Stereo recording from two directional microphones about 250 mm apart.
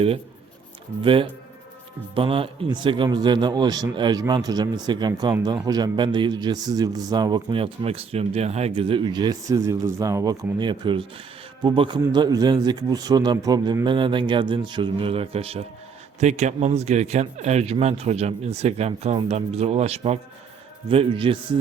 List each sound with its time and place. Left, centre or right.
1.0 s a man's voice: right